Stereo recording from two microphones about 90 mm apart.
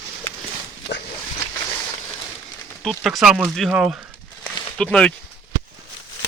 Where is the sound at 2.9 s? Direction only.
5° right (ahead or behind).